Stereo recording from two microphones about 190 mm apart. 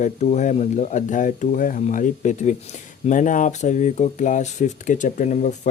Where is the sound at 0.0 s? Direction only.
40° left (ahead or behind).